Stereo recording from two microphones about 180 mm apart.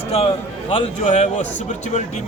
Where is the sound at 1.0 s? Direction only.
40° left (ahead or behind).